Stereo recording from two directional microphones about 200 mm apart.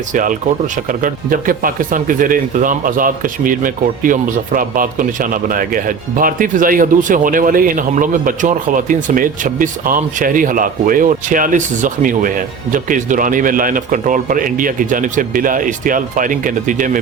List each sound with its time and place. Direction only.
0.1 s speech: 40° right (ahead or behind)